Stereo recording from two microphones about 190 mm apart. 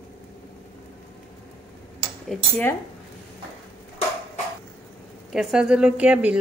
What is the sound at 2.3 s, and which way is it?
Speech, 5° left (ahead or behind).